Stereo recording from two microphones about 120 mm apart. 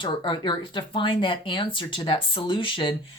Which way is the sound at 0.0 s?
40° left (ahead or behind).